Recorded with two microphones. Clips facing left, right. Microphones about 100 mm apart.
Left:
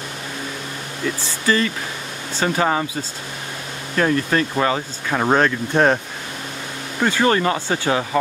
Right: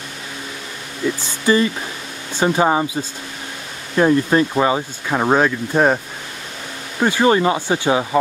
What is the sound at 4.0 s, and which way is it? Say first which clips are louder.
Speech: right 4 dB; 20° right (ahead or behind).